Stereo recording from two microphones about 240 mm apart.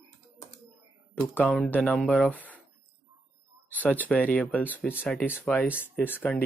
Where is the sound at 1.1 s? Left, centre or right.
Centre.